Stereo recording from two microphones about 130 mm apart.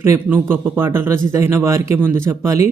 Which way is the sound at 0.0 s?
20° right (ahead or behind).